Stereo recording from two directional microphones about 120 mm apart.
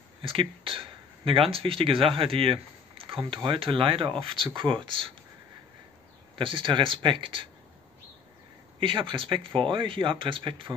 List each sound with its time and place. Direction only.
0.2 s speech: 50° right (ahead or behind)
3.1 s a sound: 45° right (ahead or behind)
3.3 s speech: 45° right (ahead or behind)
6.3 s speech: 45° right (ahead or behind)
8.7 s speech: 45° right (ahead or behind)